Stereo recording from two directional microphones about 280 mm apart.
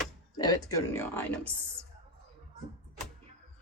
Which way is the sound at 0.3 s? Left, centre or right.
Centre.